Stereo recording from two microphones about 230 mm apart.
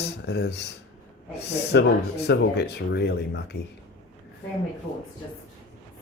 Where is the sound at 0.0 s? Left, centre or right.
Left.